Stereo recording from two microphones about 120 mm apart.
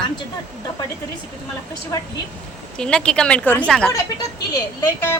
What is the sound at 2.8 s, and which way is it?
Speech, 5° left (ahead or behind).